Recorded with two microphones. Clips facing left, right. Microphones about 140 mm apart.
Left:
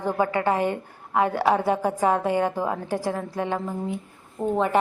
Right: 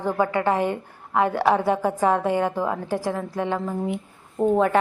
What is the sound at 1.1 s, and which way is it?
A woman's voice, 20° left (ahead or behind).